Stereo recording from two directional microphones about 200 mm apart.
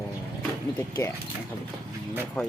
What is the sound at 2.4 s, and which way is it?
Speech, 5° left (ahead or behind).